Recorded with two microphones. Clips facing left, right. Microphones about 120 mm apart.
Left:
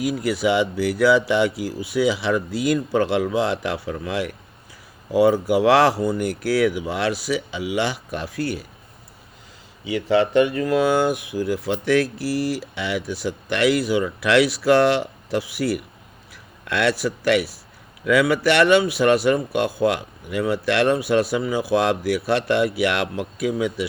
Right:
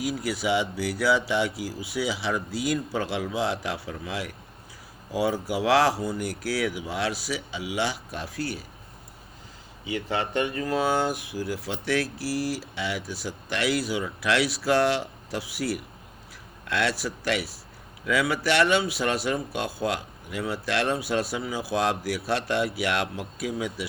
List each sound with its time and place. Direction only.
0.0 s speech: 60° left (ahead or behind)
9.8 s a man's voice: 90° left; by 23.8 s 70° left (ahead or behind)